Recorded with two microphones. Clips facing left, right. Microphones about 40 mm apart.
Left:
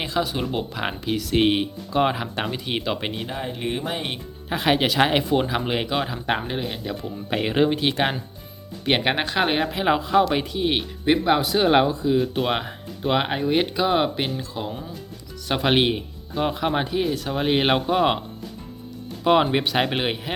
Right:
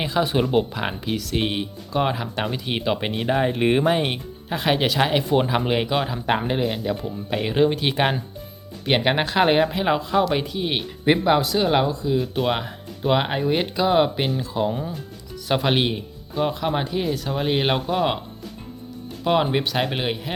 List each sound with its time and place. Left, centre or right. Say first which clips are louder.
0.1 s speech: right 5 dB; centre
3.2 s speech: right 8 dB; right
3.8 s speech: right 7 dB; centre
4.4 s speech: left 1 dB; centre
5.3 s speech: right 2 dB; centre
7.3 s speech: right 1 dB; centre
7.8 s speech: right 1 dB; centre
11.0 s speech: right 1 dB; centre
11.4 s speech: left 2 dB; centre
15.7 s speech: left 2 dB; centre
19.2 s speech: left 2 dB; centre